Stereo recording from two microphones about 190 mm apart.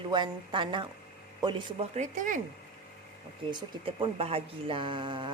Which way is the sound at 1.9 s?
40° right (ahead or behind).